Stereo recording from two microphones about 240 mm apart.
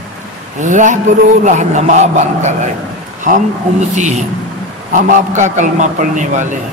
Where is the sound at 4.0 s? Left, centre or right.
Right.